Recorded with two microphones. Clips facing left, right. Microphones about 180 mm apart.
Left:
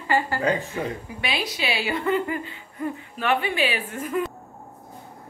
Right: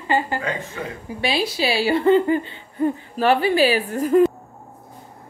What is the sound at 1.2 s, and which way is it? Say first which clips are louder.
Speech: right 6 dB; 30° right (ahead or behind).